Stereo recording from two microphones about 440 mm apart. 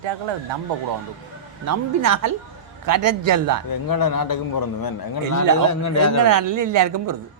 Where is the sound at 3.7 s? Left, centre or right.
Left.